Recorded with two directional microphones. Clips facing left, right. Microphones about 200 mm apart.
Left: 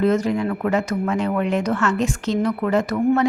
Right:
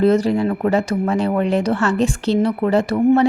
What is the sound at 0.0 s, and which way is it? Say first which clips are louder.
A woman's voice: right 4 dB; 35° right (ahead or behind).